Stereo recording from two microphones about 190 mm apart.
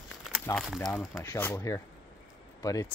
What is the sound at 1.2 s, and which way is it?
Speech, 15° left (ahead or behind).